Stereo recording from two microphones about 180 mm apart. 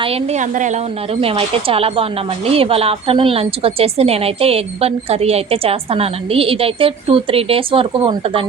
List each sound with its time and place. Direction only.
0.0 s a woman's voice: 35° right (ahead or behind)